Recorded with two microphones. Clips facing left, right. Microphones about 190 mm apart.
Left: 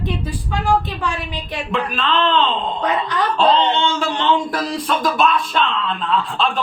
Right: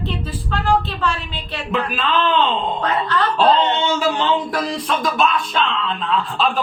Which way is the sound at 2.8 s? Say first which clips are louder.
Even; 15° left (ahead or behind).